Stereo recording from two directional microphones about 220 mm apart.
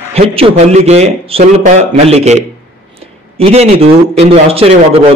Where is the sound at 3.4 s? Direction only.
25° right (ahead or behind).